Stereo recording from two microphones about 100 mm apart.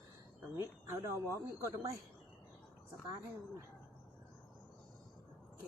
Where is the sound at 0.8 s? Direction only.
30° right (ahead or behind).